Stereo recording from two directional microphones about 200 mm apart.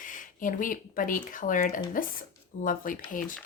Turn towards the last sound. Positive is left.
turn(degrees=40)  # may be behind; listen again after turning